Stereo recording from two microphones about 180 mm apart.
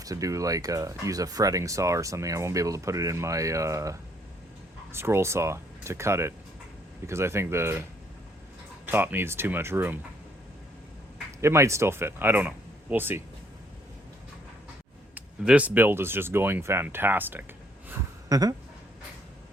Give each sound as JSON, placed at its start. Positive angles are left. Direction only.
{"t": 0.0, "sound": "speech", "side_deg": -20}
{"t": 8.9, "sound": "speech", "side_deg": -10}
{"t": 11.3, "sound": "speech", "side_deg": -15}
{"t": 15.1, "sound": "speech", "side_deg": -10}
{"t": 17.8, "sound": "a sound", "side_deg": -20}